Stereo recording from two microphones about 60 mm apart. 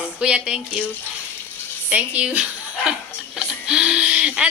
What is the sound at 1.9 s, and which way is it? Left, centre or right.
A woman's voice, right.